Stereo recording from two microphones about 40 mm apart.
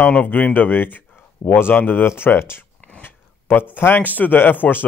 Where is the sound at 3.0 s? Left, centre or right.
Left.